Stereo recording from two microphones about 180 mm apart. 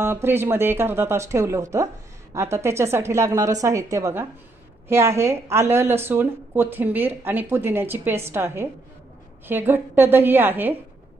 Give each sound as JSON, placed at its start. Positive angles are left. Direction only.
{"t": 0.0, "sound": "a woman's voice", "side_deg": -15}